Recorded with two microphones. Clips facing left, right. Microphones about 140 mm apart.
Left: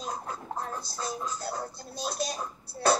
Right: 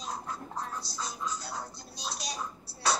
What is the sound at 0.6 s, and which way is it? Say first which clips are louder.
Speech: left 1 dB; 50° left (ahead or behind).